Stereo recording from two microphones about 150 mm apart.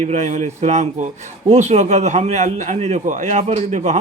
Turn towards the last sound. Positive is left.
turn(degrees=-50)  # may be behind; listen again after turning